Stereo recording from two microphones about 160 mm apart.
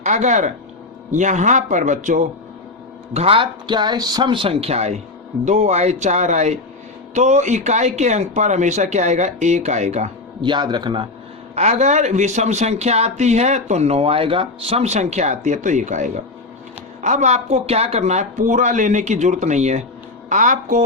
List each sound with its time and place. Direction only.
0.0 s a man's voice: 45° right (ahead or behind)
3.1 s a man's voice: 40° right (ahead or behind)
10.4 s speech: 30° right (ahead or behind)
11.5 s a man's voice: 45° right (ahead or behind)